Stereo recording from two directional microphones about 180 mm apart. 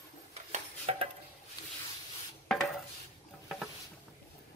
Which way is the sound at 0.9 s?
35° right (ahead or behind).